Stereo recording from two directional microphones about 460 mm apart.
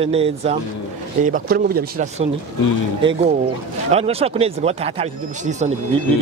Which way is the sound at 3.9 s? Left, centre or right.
Centre.